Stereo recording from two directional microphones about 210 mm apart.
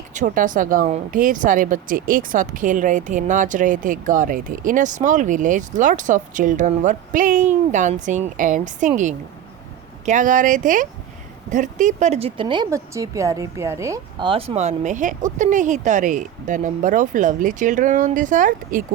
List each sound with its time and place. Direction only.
0.1 s speech: 35° right (ahead or behind)